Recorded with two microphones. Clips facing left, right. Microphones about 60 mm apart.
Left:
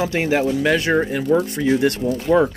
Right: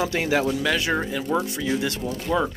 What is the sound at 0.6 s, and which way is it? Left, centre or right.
Speech, left.